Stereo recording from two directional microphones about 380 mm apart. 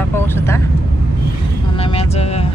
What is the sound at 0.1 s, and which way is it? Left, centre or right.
Vehicle, centre.